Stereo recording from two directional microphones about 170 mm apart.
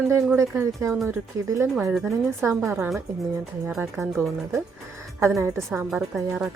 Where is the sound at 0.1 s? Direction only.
15° right (ahead or behind).